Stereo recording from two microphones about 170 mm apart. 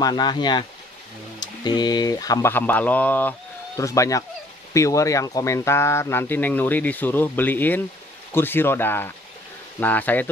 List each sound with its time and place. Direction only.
0.0 s speech: 25° left (ahead or behind)